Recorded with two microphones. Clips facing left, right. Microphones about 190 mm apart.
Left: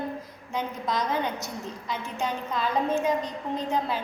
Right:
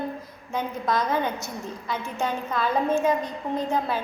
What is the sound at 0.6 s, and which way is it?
A woman's voice, 15° left (ahead or behind).